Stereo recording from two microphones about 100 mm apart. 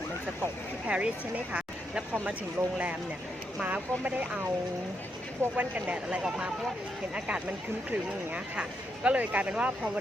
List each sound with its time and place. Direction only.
0.9 s speech: 10° right (ahead or behind)
3.6 s speech: 15° right (ahead or behind)
5.4 s speech: 15° right (ahead or behind)
7.9 s speech: 15° right (ahead or behind)